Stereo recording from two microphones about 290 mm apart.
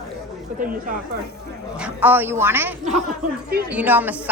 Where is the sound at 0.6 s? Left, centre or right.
Right.